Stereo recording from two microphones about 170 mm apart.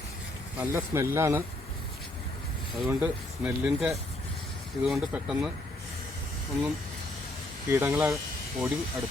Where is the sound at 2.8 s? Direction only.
10° right (ahead or behind).